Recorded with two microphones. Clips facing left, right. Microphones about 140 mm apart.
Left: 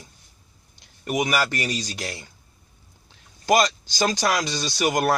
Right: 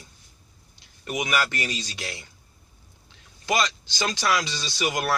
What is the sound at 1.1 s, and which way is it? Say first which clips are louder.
Speech: left 3 dB; 40° left (ahead or behind).